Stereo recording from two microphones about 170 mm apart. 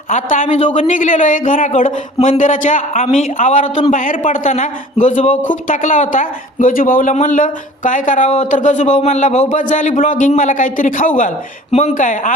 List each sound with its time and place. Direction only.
0.1 s a man's voice: 50° left (ahead or behind)